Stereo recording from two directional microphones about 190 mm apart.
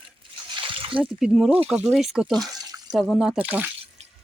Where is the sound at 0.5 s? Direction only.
25° right (ahead or behind).